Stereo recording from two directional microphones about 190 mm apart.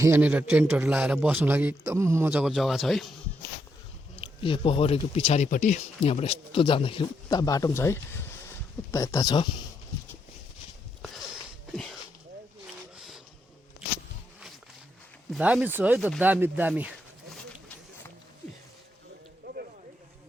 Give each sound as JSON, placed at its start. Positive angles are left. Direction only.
{"t": 0.0, "sound": "a man's voice", "side_deg": -10}
{"t": 4.1, "sound": "speech", "side_deg": 30}
{"t": 11.0, "sound": "a sound", "side_deg": 0}
{"t": 13.0, "sound": "printer", "side_deg": 0}
{"t": 15.3, "sound": "speech", "side_deg": -5}